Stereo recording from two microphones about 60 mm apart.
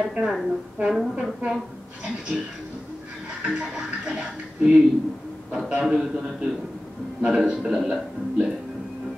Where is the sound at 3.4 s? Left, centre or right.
Centre.